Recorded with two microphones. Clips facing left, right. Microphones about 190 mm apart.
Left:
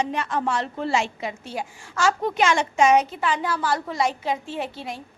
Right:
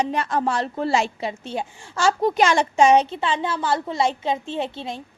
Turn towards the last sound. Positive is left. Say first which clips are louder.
# right 3 dB
turn(degrees=-25)  # may be behind; listen again after turning